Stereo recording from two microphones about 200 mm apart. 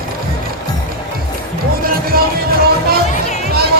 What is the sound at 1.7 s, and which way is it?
Music, 45° right (ahead or behind).